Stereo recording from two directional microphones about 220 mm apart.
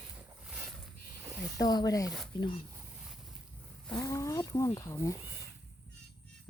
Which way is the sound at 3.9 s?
15° left (ahead or behind).